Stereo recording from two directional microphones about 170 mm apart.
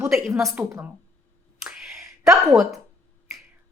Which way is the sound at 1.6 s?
5° right (ahead or behind).